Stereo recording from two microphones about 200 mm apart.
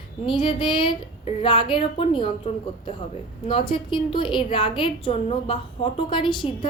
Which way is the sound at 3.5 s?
25° left (ahead or behind).